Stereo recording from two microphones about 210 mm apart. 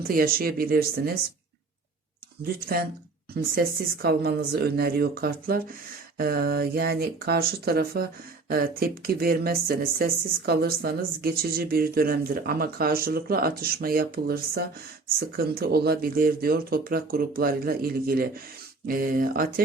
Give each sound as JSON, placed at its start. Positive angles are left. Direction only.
{"t": 0.1, "sound": "speech", "side_deg": -45}
{"t": 2.7, "sound": "speech", "side_deg": -45}